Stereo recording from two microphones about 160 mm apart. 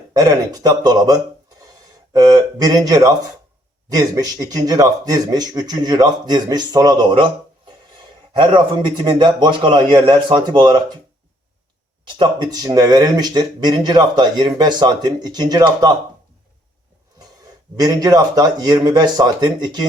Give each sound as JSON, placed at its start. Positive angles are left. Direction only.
{"t": 0.1, "sound": "speech", "side_deg": -25}
{"t": 8.3, "sound": "speech", "side_deg": -30}
{"t": 12.2, "sound": "speech", "side_deg": -25}
{"t": 17.7, "sound": "speech", "side_deg": -25}